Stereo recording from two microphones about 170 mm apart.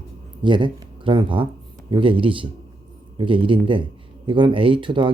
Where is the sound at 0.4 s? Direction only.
30° right (ahead or behind).